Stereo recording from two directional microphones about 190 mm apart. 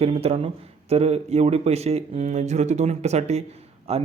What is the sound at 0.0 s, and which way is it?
A man's voice, 30° right (ahead or behind).